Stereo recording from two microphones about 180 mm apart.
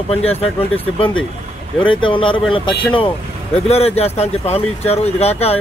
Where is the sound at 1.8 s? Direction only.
30° left (ahead or behind).